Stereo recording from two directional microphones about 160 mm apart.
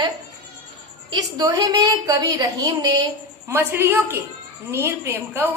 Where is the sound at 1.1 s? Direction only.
25° right (ahead or behind).